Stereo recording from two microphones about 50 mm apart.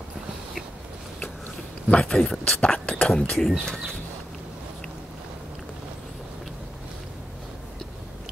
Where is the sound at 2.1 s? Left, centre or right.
Centre.